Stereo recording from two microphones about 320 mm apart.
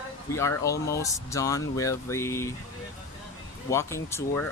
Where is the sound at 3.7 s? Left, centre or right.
Centre.